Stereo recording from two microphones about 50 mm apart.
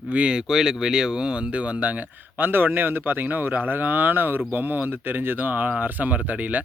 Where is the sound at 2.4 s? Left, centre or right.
Right.